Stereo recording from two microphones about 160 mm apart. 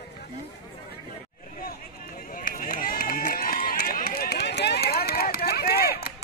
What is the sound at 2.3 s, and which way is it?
Run, 60° left (ahead or behind).